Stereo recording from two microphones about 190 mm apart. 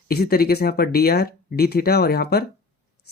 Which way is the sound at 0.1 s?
55° left (ahead or behind).